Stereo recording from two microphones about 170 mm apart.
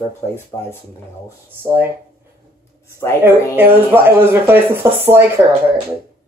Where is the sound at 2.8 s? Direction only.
15° left (ahead or behind).